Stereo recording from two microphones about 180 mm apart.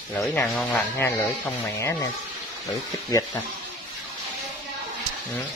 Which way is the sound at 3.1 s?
20° left (ahead or behind).